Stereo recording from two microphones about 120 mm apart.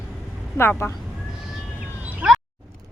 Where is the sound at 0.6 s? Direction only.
20° left (ahead or behind).